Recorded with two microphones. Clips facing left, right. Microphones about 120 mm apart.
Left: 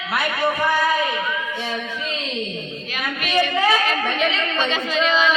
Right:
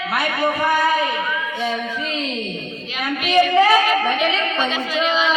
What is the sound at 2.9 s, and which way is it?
A woman's voice, 15° right (ahead or behind).